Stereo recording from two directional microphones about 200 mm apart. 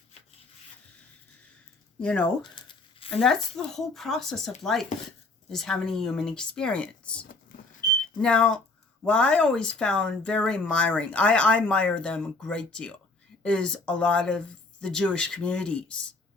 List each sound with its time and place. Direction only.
2.0 s speech: 5° left (ahead or behind)
2.4 s a sound: 25° left (ahead or behind)
3.2 s speech: centre (ahead or behind)